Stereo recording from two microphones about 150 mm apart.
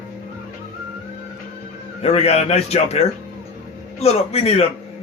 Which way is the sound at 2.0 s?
45° left (ahead or behind).